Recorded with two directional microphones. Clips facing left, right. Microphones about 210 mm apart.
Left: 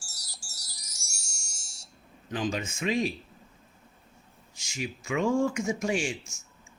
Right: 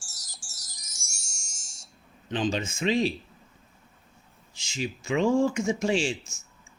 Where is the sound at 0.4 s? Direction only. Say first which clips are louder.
Left 1 dB; 65° left (ahead or behind).